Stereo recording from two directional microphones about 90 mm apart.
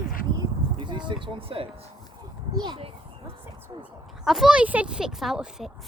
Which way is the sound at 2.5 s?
50° right (ahead or behind).